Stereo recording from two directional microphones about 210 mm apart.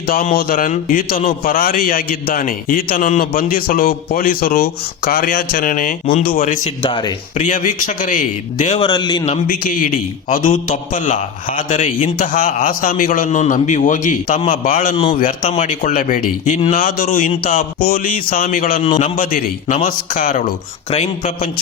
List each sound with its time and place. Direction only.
0.1 s a man's voice: 40° left (ahead or behind)
6.8 s speech: 25° left (ahead or behind)
7.4 s a man's voice: 35° left (ahead or behind)
8.8 s speech: 20° left (ahead or behind)
9.3 s a man's voice: 40° left (ahead or behind)